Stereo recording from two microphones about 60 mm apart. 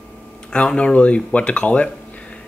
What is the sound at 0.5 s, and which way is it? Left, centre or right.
Speech, centre.